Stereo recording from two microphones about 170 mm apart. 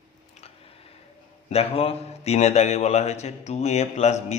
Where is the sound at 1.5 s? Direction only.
35° left (ahead or behind).